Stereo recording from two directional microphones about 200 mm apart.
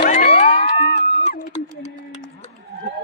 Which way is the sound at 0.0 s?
45° left (ahead or behind).